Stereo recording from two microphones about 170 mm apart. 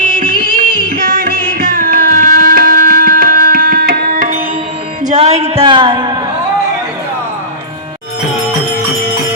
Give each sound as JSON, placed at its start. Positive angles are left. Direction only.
{"t": 0.5, "sound": "music", "side_deg": -55}
{"t": 5.0, "sound": "music", "side_deg": -40}